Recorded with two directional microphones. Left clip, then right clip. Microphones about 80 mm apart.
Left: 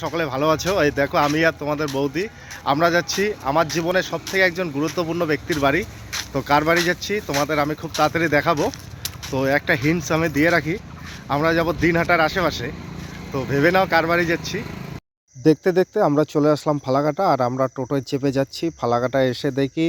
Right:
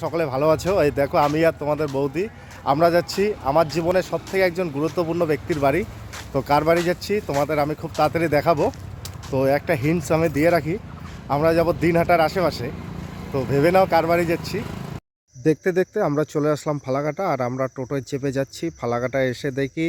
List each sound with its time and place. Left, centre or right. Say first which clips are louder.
0.0 s speech: right 1 dB; right
15.4 s speech: left 3 dB; centre
16.8 s speech: left 4 dB; centre